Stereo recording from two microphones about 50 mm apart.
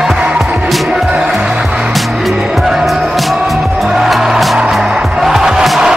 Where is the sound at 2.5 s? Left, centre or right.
Centre.